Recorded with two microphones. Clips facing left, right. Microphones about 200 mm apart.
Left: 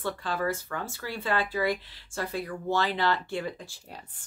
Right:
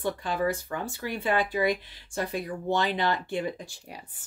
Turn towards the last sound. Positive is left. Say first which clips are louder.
# right 3 dB
turn(degrees=-15)  # may be behind; listen again after turning